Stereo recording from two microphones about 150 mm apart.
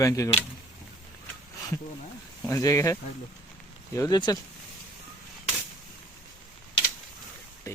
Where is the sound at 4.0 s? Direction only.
25° left (ahead or behind).